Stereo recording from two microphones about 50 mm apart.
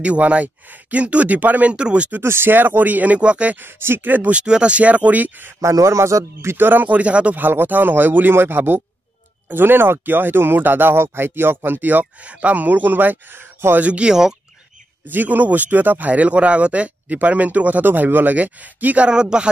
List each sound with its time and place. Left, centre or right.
0.0 s speech: right
2.2 s speech: right
2.5 s speech: right
3.5 s speech: right
4.3 s speech: right
5.6 s a man's voice: right
6.5 s speech: right
7.4 s speech: right
13.7 s speech: right
15.0 s speech: right
19.0 s speech: centre